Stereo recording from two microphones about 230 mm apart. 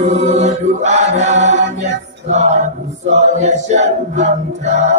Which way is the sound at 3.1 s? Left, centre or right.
Right.